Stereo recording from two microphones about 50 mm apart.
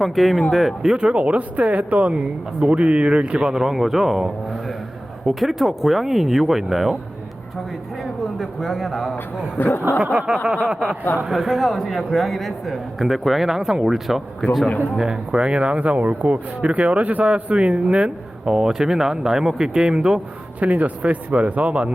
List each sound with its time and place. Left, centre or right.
0.0 s a man's voice: centre
0.9 s a man's voice: right; by 6.9 s centre
8.4 s a man's voice: centre
9.6 s speech: left
10.0 s speech: right
11.3 s a man's voice: centre
20.6 s speech: right